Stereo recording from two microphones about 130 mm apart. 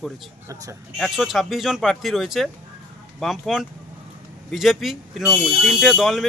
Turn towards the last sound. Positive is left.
turn(degrees=0)  # may be behind; listen again after turning